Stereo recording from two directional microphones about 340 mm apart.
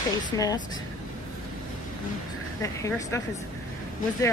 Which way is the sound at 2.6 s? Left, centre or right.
Centre.